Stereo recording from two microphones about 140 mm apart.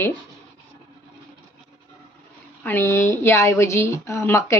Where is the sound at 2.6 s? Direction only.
15° left (ahead or behind).